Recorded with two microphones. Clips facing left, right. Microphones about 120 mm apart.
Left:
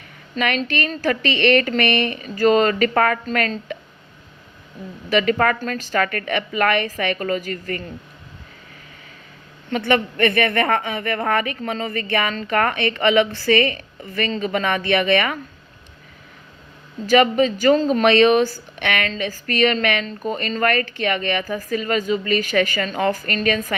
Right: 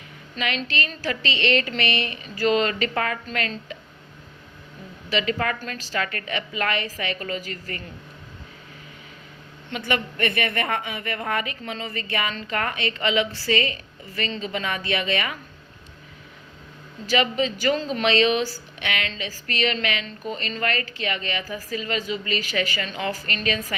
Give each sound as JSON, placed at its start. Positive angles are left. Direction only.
{"t": 0.3, "sound": "speech", "side_deg": 55}
{"t": 5.0, "sound": "speech", "side_deg": 50}
{"t": 9.8, "sound": "a woman's voice", "side_deg": 55}
{"t": 17.1, "sound": "speech", "side_deg": 50}